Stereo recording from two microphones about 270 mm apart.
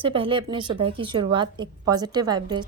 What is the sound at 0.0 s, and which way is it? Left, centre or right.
A woman's voice, centre.